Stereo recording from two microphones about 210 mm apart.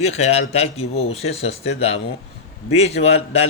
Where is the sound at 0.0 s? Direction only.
30° left (ahead or behind).